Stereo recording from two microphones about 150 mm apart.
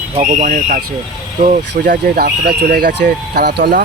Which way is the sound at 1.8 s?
85° right.